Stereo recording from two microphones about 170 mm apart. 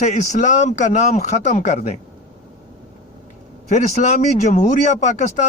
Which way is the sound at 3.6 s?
45° left (ahead or behind).